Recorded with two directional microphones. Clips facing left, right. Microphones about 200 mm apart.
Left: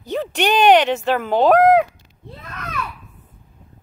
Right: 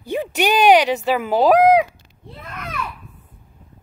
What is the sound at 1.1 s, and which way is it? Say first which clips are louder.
Speech: even; 5° right (ahead or behind).